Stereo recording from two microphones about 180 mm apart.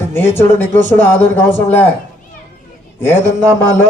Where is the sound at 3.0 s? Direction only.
15° left (ahead or behind).